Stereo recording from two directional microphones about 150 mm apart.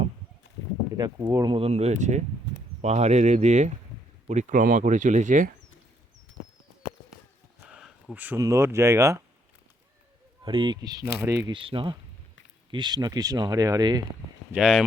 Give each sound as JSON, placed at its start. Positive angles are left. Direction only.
{"t": 1.2, "sound": "speech", "side_deg": -20}
{"t": 1.5, "sound": "speech", "side_deg": -40}
{"t": 7.7, "sound": "a sound", "side_deg": -5}
{"t": 8.4, "sound": "speech", "side_deg": -20}
{"t": 10.4, "sound": "speech", "side_deg": -35}
{"t": 11.5, "sound": "speech", "side_deg": -35}
{"t": 14.5, "sound": "speech", "side_deg": -5}